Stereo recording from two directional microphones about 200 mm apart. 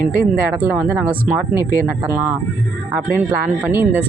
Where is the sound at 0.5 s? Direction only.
10° right (ahead or behind).